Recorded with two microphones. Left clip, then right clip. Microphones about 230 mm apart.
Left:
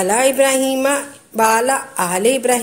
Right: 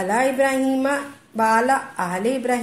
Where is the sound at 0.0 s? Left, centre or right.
Left.